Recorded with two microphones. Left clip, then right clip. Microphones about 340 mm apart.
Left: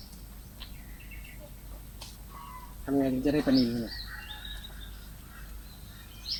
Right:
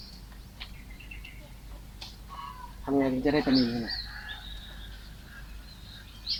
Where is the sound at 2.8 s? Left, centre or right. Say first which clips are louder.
Right 2 dB; right.